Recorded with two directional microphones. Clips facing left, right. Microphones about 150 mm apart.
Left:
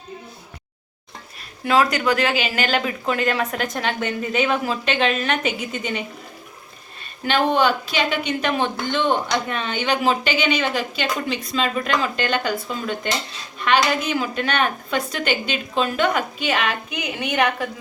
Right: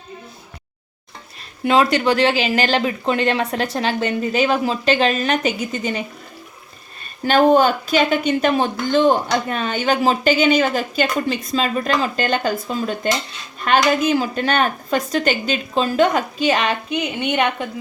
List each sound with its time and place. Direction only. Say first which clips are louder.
1.6 s speech: right 3 dB; 25° right (ahead or behind)
7.3 s speech: right 5 dB; 40° right (ahead or behind); by 17.7 s 25° right (ahead or behind)